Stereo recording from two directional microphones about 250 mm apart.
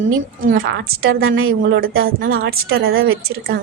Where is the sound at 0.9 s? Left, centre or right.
Right.